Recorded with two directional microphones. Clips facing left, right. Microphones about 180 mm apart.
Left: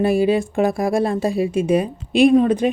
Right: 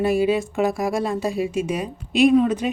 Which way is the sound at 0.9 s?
30° left (ahead or behind).